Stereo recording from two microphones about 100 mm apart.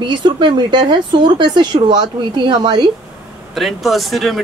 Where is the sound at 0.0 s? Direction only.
50° right (ahead or behind).